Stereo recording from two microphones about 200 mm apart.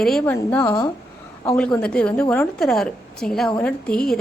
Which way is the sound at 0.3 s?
15° left (ahead or behind).